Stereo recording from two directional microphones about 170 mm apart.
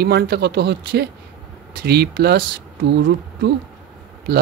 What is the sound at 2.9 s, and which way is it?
Speech, 85° right.